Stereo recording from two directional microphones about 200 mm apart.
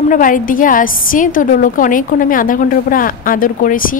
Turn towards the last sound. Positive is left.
turn(degrees=45)  # may be behind; listen again after turning